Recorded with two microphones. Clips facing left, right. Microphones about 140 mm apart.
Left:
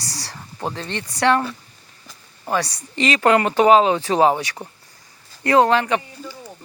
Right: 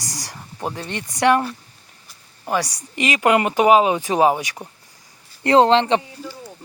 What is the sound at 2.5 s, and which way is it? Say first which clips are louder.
Speech: even; 15° right (ahead or behind).